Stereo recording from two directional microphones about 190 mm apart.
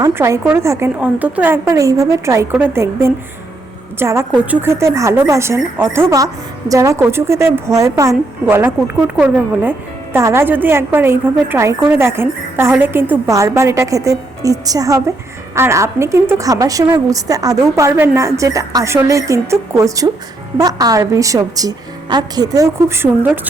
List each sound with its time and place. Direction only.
0.0 s a woman's voice: 15° right (ahead or behind)